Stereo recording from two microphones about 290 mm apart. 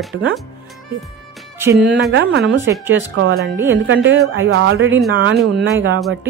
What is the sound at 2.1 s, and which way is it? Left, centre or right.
Speech, right.